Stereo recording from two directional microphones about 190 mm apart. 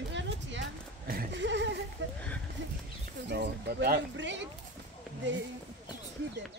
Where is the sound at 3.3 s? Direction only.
60° right (ahead or behind).